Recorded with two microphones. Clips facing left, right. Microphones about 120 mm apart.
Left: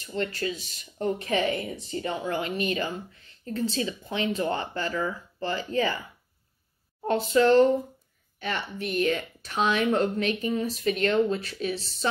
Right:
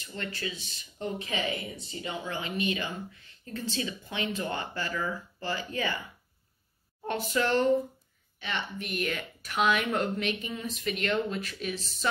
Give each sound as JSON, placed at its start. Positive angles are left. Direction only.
{"t": 0.0, "sound": "speech", "side_deg": 35}
{"t": 7.1, "sound": "speech", "side_deg": 30}